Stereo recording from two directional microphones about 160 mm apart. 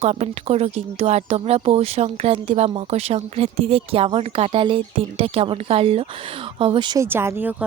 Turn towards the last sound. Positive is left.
turn(degrees=-10)  # may be behind; listen again after turning